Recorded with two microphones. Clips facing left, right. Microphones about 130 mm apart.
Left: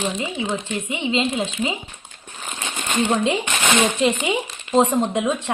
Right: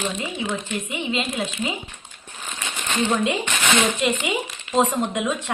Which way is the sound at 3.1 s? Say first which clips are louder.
Left 2 dB; 25° left (ahead or behind).